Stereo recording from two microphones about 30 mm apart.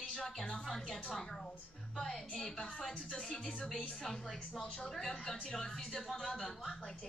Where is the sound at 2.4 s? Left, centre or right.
Left.